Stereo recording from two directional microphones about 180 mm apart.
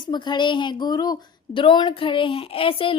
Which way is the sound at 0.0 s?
25° left (ahead or behind).